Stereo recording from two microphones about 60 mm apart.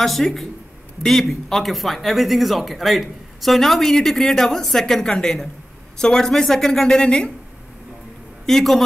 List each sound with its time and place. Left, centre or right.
0.0 s a woman's voice: centre
8.5 s speech: centre